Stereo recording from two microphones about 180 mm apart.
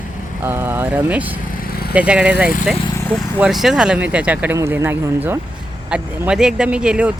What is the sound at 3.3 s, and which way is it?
Speech, 5° right (ahead or behind).